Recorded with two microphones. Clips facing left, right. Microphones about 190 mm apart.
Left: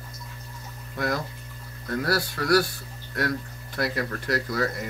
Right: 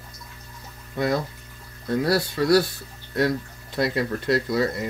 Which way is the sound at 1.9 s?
25° right (ahead or behind).